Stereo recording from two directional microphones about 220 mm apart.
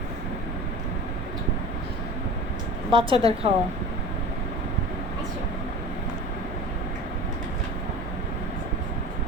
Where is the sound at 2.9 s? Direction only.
25° right (ahead or behind).